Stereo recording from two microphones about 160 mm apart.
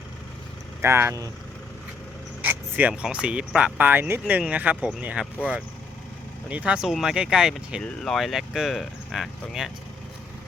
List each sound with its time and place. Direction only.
0.8 s speech: 15° right (ahead or behind)
2.4 s speech: 10° right (ahead or behind)